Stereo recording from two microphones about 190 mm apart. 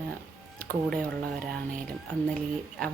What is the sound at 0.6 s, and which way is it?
Speech, 5° left (ahead or behind).